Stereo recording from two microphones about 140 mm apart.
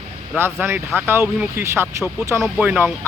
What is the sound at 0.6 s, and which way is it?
Speech, 15° right (ahead or behind).